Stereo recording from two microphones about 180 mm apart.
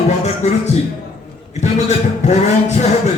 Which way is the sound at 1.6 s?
40° left (ahead or behind).